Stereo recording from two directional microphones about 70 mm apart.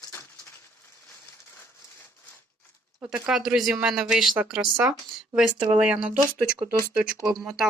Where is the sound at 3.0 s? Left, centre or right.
Centre.